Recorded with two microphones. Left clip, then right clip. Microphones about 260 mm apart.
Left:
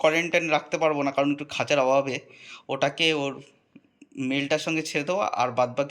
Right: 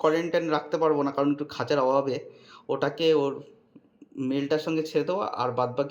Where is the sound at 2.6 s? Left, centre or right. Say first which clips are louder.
Left 1 dB; centre.